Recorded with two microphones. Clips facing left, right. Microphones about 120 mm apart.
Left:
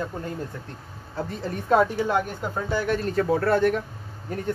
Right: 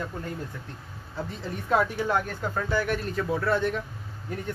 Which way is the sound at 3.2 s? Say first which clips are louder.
Left 6 dB; 50° left (ahead or behind).